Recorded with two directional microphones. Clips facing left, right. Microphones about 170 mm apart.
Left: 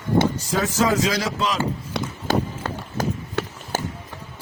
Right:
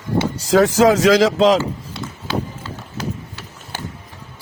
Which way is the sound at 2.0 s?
70° left (ahead or behind).